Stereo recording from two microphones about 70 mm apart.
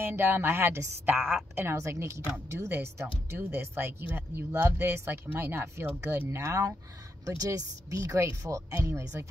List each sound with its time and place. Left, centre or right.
0.0 s speech: right